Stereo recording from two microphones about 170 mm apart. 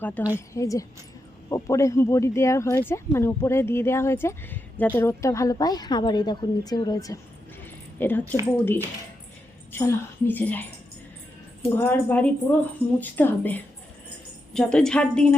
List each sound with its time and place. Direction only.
0.0 s a woman's voice: 10° left (ahead or behind)
7.9 s speech: 10° left (ahead or behind)
11.7 s a woman's voice: 10° left (ahead or behind)